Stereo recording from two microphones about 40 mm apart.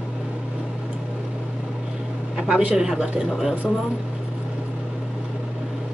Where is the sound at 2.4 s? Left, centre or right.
Right.